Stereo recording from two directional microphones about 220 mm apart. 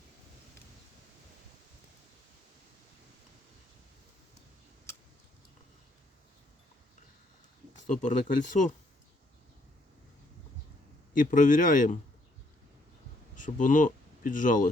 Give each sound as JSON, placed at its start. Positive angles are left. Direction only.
{"t": 7.9, "sound": "speech", "side_deg": 35}
{"t": 11.1, "sound": "speech", "side_deg": 35}
{"t": 13.3, "sound": "speech", "side_deg": 35}